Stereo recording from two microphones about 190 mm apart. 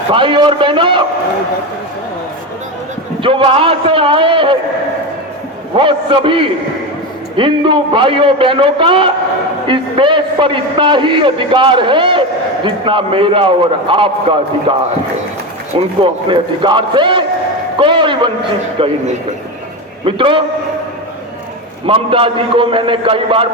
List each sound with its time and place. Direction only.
0.1 s a man's voice: 25° right (ahead or behind)
3.2 s a man's voice: 25° right (ahead or behind)
5.7 s a man's voice: 25° right (ahead or behind)
20.1 s a man's voice: 25° right (ahead or behind)
21.8 s a man's voice: 30° right (ahead or behind)